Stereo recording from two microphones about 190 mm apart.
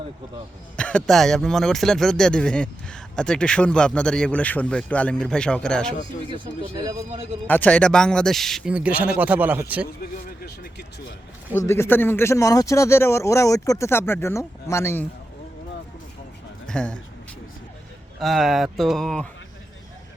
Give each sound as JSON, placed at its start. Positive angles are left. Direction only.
{"t": 0.8, "sound": "speech", "side_deg": 5}
{"t": 6.3, "sound": "speech", "side_deg": -20}
{"t": 7.4, "sound": "speech", "side_deg": 10}
{"t": 10.4, "sound": "speech", "side_deg": 60}
{"t": 11.5, "sound": "speech", "side_deg": 15}
{"t": 16.6, "sound": "speech", "side_deg": 5}
{"t": 18.2, "sound": "speech", "side_deg": 0}